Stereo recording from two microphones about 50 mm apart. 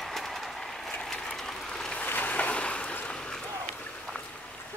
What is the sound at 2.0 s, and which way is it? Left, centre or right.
Boat, left.